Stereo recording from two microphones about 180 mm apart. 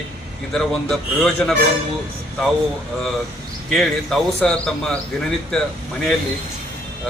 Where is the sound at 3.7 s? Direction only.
Centre (ahead or behind).